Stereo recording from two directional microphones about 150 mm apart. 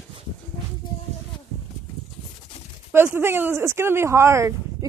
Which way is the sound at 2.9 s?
15° right (ahead or behind).